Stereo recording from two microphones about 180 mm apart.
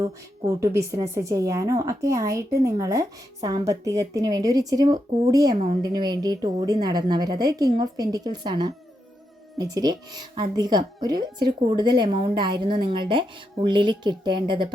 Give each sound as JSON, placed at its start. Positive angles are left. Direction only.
{"t": 0.0, "sound": "a woman's voice", "side_deg": -15}